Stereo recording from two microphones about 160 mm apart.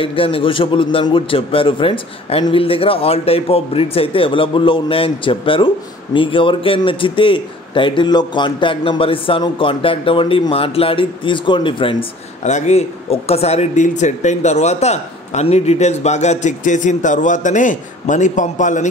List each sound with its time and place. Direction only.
0.0 s a man's voice: 35° left (ahead or behind)
12.4 s speech: 45° left (ahead or behind)